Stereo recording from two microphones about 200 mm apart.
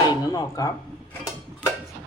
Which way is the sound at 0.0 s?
15° left (ahead or behind).